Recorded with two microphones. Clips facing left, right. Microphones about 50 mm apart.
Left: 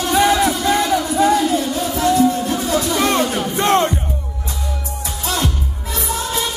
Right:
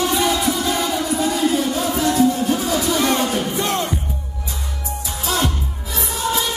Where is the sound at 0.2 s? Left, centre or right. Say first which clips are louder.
Left 4 dB; left.